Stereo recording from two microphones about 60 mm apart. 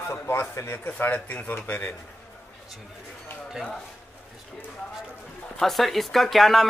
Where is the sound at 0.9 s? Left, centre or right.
Left.